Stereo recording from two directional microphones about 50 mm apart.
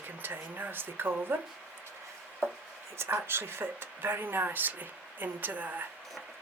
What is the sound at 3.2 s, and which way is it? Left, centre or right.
Speech, right.